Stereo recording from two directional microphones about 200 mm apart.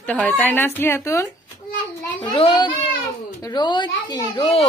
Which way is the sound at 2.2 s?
25° left (ahead or behind).